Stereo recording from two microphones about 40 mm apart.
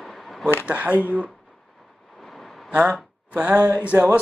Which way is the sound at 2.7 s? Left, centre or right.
Right.